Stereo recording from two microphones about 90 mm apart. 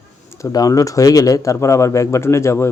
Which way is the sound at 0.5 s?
40° left (ahead or behind).